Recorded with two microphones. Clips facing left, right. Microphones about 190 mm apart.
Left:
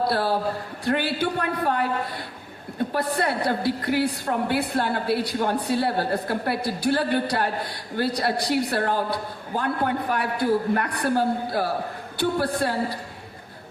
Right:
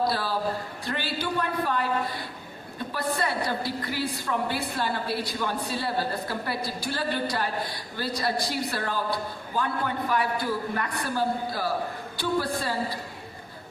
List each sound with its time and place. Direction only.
0.1 s a woman's voice: 60° left (ahead or behind)